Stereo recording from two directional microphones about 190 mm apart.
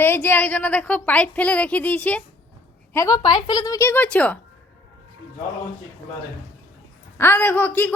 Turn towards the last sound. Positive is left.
turn(degrees=10)  # may be behind; listen again after turning